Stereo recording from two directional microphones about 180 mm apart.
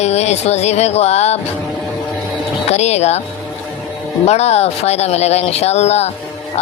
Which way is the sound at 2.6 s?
35° left (ahead or behind).